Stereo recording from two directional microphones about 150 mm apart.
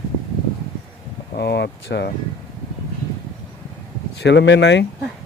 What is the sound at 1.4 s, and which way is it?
Speech, 90° left.